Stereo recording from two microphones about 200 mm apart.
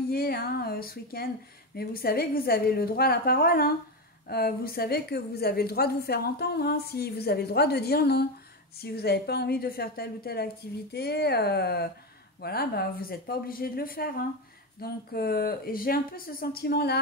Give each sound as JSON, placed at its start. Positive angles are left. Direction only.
{"t": 0.1, "sound": "a woman's voice", "side_deg": 50}